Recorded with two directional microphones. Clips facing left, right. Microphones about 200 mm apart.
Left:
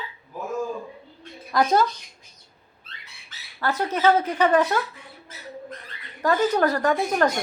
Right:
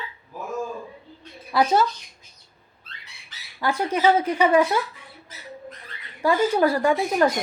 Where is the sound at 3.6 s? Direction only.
10° right (ahead or behind).